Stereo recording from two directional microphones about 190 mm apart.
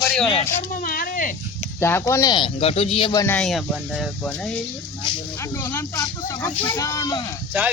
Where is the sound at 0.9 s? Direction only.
50° left (ahead or behind).